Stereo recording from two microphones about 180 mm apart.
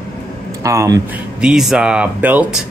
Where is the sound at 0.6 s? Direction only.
15° right (ahead or behind).